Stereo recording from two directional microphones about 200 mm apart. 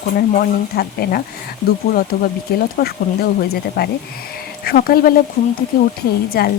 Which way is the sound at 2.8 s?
50° left (ahead or behind).